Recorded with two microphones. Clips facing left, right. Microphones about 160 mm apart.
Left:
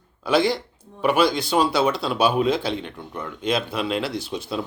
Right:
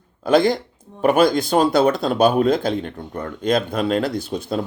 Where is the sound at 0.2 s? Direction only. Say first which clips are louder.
Right 4 dB; 45° right (ahead or behind).